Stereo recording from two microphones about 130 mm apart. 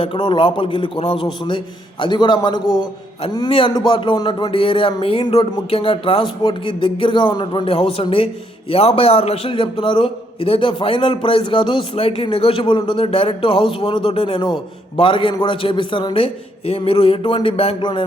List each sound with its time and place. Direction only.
0.0 s a man's voice: 40° left (ahead or behind)